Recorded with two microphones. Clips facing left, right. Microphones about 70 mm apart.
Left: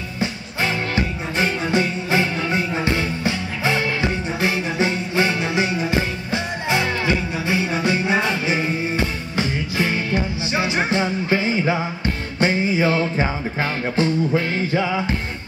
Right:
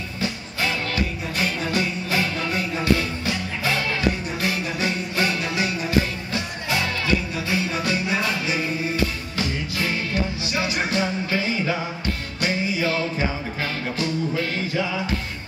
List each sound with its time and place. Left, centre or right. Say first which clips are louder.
0.2 s music: left 3 dB; left